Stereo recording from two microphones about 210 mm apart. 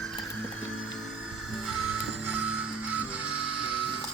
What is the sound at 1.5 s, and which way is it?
Music, 5° right (ahead or behind).